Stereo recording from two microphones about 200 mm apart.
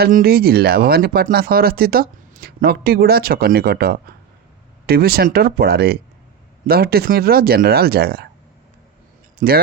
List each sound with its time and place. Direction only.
0.0 s speech: 50° right (ahead or behind)
9.4 s speech: 45° right (ahead or behind)